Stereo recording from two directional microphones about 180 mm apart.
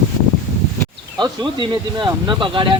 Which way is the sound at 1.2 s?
25° right (ahead or behind).